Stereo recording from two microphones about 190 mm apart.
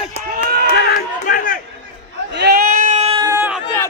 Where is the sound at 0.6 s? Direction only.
50° left (ahead or behind).